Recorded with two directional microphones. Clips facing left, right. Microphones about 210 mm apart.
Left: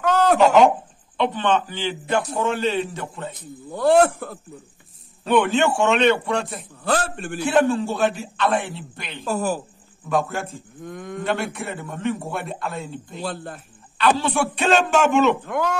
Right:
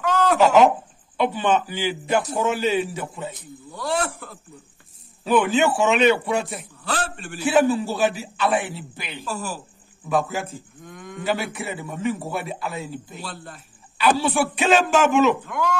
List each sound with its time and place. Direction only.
0.0 s a sound: 50° left (ahead or behind)
0.4 s speech: centre (ahead or behind)
3.3 s speech: 55° left (ahead or behind)
5.2 s a man's voice: centre (ahead or behind)
6.8 s speech: 55° left (ahead or behind)
7.4 s a man's voice: 5° right (ahead or behind)
9.2 s speech: 55° left (ahead or behind)
10.0 s a man's voice: centre (ahead or behind)
10.8 s speech: 50° left (ahead or behind)
11.2 s a man's voice: 5° right (ahead or behind)
13.2 s speech: 55° left (ahead or behind)
13.9 s a man's voice: 5° right (ahead or behind)
15.4 s speech: 55° left (ahead or behind)